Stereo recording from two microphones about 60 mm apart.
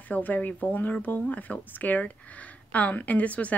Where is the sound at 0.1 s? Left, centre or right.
Left.